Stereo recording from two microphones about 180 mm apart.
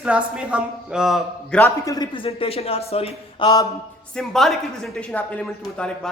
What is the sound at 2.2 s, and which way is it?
Speech, 30° left (ahead or behind).